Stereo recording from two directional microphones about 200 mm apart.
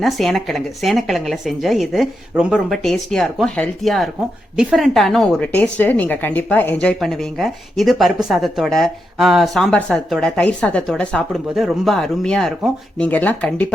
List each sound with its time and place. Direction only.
0.0 s speech: centre (ahead or behind)